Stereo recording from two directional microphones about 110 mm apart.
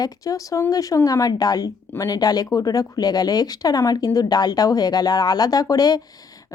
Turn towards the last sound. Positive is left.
turn(degrees=35)  # may be behind; listen again after turning